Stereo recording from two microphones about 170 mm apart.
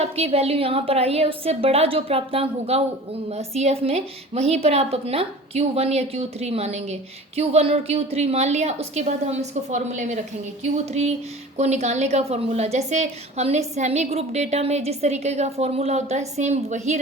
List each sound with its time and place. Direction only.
0.0 s a woman's voice: 35° right (ahead or behind)